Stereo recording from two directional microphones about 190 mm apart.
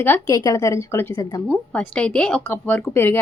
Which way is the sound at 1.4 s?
5° left (ahead or behind).